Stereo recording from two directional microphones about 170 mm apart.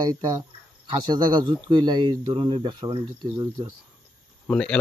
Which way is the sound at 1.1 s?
25° right (ahead or behind).